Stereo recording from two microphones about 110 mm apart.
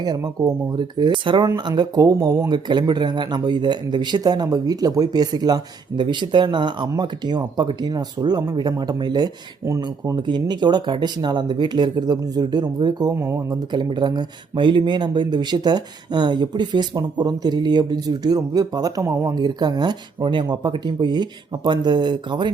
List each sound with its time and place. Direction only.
0.0 s speech: 40° right (ahead or behind)
10.2 s speech: 45° right (ahead or behind)